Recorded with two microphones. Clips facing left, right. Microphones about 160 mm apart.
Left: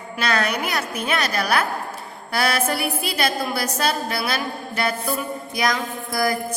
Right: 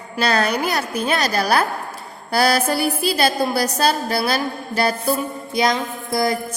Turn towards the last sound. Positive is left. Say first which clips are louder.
# right 2 dB
turn(degrees=-25)  # may be behind; listen again after turning